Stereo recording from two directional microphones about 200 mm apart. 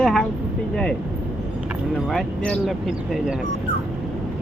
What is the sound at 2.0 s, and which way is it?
Speech, 5° left (ahead or behind).